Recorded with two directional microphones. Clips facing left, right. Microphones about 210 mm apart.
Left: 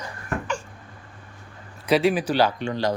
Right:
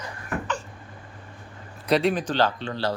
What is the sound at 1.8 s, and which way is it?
Speech, centre (ahead or behind).